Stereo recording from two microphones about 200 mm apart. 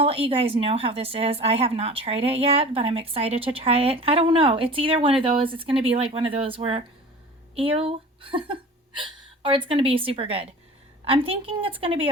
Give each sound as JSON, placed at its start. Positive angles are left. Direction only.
{"t": 0.0, "sound": "a woman's voice", "side_deg": -30}